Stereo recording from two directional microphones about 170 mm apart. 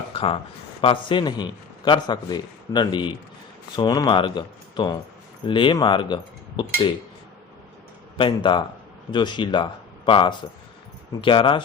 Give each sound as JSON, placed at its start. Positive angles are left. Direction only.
{"t": 0.1, "sound": "a sound", "side_deg": 35}
{"t": 0.8, "sound": "a man's voice", "side_deg": 30}
{"t": 8.2, "sound": "a man's voice", "side_deg": 30}